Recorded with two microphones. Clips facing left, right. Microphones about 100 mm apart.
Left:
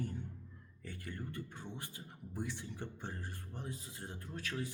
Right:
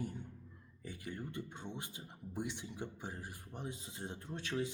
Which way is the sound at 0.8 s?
15° right (ahead or behind).